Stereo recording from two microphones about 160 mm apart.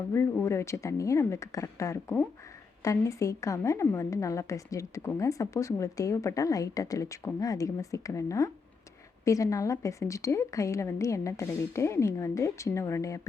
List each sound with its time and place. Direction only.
0.1 s a woman's voice: 15° left (ahead or behind)